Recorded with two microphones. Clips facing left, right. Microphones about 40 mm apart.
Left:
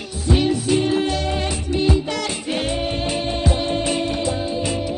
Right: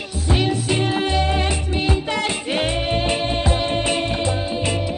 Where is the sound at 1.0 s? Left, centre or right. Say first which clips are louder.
Right 2 dB; right.